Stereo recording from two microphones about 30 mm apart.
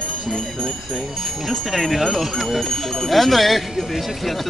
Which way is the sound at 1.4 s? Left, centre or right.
Centre.